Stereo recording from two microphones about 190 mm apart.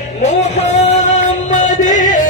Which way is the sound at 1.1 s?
40° left (ahead or behind).